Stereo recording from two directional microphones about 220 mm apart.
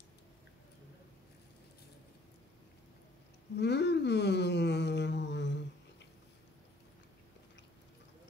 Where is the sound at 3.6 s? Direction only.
50° left (ahead or behind).